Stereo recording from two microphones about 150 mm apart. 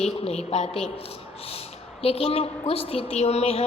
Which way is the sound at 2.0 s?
40° left (ahead or behind).